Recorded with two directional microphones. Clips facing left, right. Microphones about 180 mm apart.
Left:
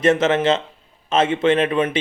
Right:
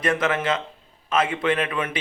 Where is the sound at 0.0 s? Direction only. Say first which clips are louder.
Left 7 dB; 25° left (ahead or behind).